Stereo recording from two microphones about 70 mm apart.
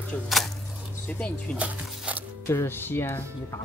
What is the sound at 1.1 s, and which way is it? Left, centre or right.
Speech, left.